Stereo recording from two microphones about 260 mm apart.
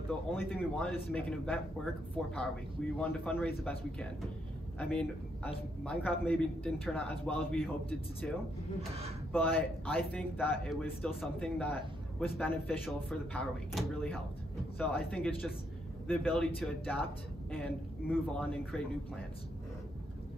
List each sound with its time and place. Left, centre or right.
0.3 s a man's voice: centre
3.0 s a man's voice: centre